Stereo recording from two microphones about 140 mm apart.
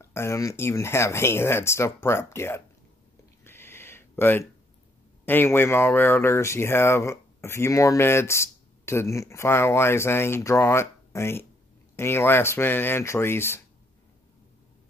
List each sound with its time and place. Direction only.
0.0 s speech: 20° left (ahead or behind)
3.4 s a sound: 15° left (ahead or behind)
5.2 s speech: 15° left (ahead or behind)